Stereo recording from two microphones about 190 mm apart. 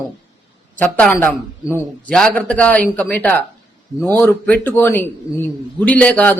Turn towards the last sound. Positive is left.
turn(degrees=5)  # may be behind; listen again after turning